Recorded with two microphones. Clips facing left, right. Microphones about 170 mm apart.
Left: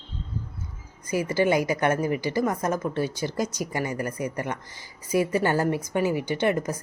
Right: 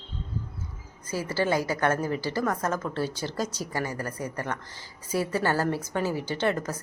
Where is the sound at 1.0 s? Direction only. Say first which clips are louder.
Left 4 dB; 15° left (ahead or behind).